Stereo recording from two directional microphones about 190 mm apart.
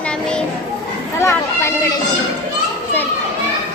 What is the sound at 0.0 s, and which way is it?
Children playing, 5° left (ahead or behind).